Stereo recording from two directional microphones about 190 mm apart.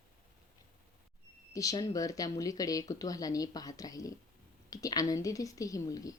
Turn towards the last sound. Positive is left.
turn(degrees=20)  # may be behind; listen again after turning